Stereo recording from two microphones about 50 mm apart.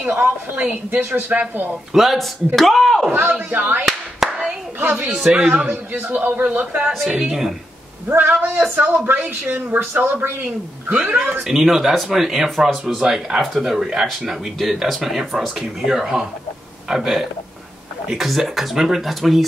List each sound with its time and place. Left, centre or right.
0.0 s a woman's voice: right
0.9 s a man's voice: right
1.7 s speech: centre
3.1 s a man's voice: right
4.2 s clapping: centre
4.7 s a woman's voice: right
5.1 s speech: centre
5.7 s a man's voice: right
7.1 s speech: centre
8.1 s a man's voice: right
11.0 s a woman's voice: right
11.4 s speech: centre